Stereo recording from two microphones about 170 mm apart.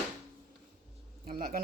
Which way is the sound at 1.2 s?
55° right (ahead or behind).